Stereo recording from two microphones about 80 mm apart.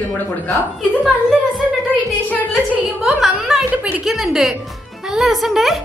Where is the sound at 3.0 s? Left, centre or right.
Centre.